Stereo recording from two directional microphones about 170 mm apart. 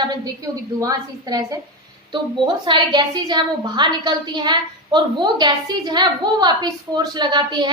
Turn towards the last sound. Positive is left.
turn(degrees=-25)  # may be behind; listen again after turning